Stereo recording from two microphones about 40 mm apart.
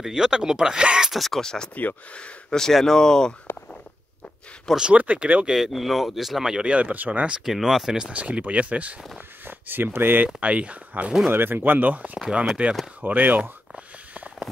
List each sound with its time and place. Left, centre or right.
0.0 s speech: centre
1.1 s speech: centre
1.4 s speech: centre
4.9 s speech: right
5.5 s speech: centre
6.4 s speech: centre
6.7 s speech: right
7.4 s speech: centre
8.1 s speech: right
9.4 s speech: right
10.2 s speech: right
11.2 s speech: right